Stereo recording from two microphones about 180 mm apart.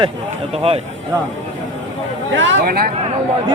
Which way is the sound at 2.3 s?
90° right.